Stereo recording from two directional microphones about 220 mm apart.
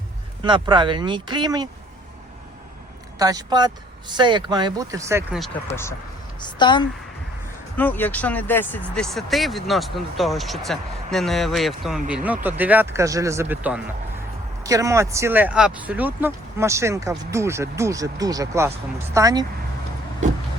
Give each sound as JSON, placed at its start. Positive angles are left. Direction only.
{"t": 0.4, "sound": "speech", "side_deg": -20}
{"t": 3.2, "sound": "speech", "side_deg": -15}
{"t": 6.4, "sound": "a woman's voice", "side_deg": 20}
{"t": 7.8, "sound": "speech", "side_deg": 10}